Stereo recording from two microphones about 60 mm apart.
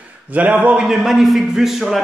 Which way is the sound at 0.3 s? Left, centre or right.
Right.